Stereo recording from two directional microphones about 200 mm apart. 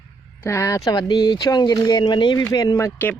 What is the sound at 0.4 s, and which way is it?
Speech, 15° left (ahead or behind).